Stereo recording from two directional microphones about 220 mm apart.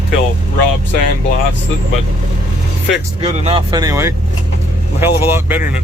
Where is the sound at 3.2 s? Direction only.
25° right (ahead or behind).